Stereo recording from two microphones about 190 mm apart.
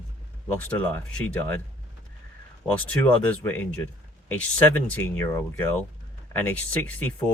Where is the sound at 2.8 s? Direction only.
5° left (ahead or behind).